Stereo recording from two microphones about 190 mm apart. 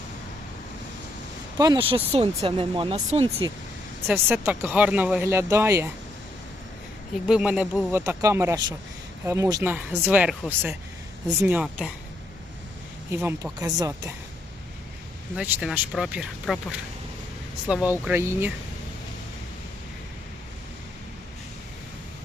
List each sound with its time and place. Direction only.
1.5 s speech: 20° right (ahead or behind)
4.0 s speech: 10° right (ahead or behind)
7.3 s speech: 5° right (ahead or behind)
13.1 s speech: 10° right (ahead or behind)
15.4 s speech: 10° right (ahead or behind)
17.7 s speech: 5° right (ahead or behind)